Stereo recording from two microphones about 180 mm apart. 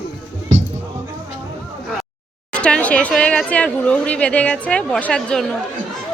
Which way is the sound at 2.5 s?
5° left (ahead or behind).